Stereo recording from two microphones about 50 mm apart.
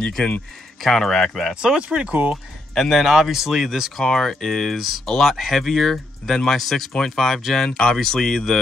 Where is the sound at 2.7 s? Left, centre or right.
Centre.